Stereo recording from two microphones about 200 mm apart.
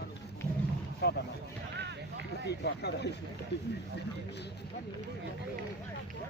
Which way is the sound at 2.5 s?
55° left (ahead or behind).